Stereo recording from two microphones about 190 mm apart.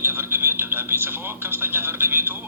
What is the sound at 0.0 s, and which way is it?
Speech, 10° right (ahead or behind).